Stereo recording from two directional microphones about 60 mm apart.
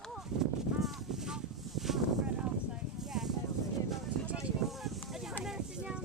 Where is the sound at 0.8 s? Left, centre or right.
Centre.